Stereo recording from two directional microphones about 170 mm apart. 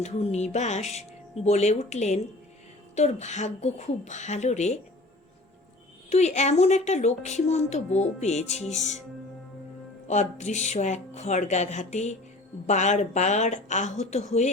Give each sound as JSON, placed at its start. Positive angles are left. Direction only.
{"t": 0.0, "sound": "a woman's voice", "side_deg": 40}
{"t": 6.1, "sound": "a woman's voice", "side_deg": 40}
{"t": 10.1, "sound": "speech", "side_deg": 45}